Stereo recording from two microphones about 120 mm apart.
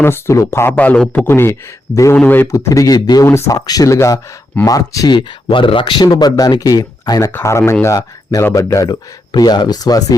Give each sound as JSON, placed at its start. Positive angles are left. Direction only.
{"t": 0.0, "sound": "speech", "side_deg": 20}
{"t": 2.5, "sound": "speech", "side_deg": 30}
{"t": 5.1, "sound": "speech", "side_deg": 45}
{"t": 7.3, "sound": "speech", "side_deg": 20}